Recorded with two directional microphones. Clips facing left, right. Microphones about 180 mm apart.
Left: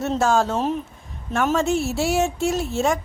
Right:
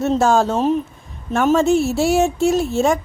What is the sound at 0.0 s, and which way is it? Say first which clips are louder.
A woman's voice: right 4 dB; 25° right (ahead or behind).